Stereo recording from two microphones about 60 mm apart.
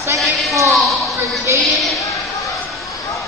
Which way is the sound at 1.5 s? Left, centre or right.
Right.